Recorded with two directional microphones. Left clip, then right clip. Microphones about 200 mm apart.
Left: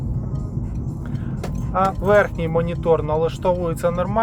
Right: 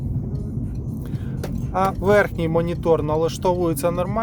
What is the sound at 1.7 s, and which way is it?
Speech, 20° right (ahead or behind).